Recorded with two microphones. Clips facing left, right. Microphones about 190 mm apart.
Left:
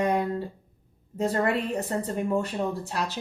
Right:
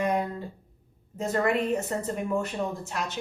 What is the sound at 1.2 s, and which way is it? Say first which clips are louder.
A woman's voice: even; 35° left (ahead or behind).